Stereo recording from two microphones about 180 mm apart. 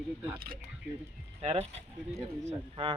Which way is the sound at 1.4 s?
35° right (ahead or behind).